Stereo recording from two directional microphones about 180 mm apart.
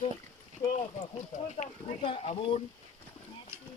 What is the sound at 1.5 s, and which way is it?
A man's voice, 35° left (ahead or behind).